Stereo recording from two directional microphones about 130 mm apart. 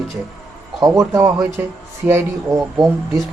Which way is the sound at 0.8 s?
25° right (ahead or behind).